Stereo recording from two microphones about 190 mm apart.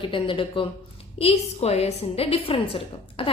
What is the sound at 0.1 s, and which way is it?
A woman's voice, 25° left (ahead or behind).